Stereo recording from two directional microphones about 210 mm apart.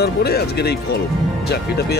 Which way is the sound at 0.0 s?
50° left (ahead or behind).